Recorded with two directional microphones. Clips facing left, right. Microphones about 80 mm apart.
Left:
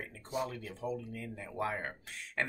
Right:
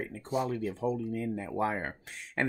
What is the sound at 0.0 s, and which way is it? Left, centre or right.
Speech, right.